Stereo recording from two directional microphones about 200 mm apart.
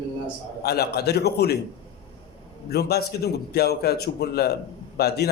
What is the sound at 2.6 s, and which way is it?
Speech, 55° left (ahead or behind).